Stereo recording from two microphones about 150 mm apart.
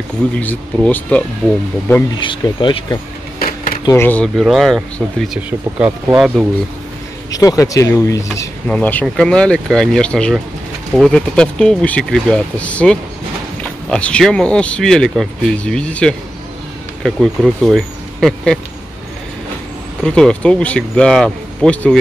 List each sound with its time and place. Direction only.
0.4 s speech: 10° left (ahead or behind)
2.1 s speech: 30° left (ahead or behind)
3.3 s a sound: 90° left
3.9 s speech: 10° left (ahead or behind)
4.4 s speech: centre (ahead or behind)
7.2 s speech: 25° left (ahead or behind)
8.6 s speech: 10° left (ahead or behind)
20.0 s speech: 5° left (ahead or behind)